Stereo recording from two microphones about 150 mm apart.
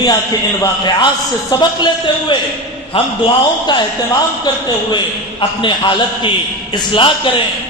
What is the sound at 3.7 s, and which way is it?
Speech, 30° left (ahead or behind).